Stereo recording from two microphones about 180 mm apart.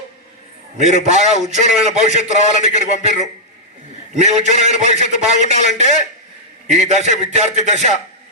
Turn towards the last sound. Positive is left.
turn(degrees=-40)  # may be behind; listen again after turning